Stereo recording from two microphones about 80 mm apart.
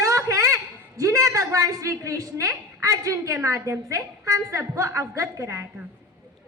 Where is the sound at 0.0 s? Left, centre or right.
Right.